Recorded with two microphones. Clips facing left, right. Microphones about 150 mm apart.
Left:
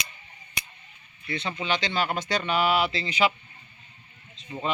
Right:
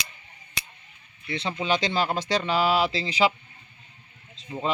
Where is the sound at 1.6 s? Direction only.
30° right (ahead or behind).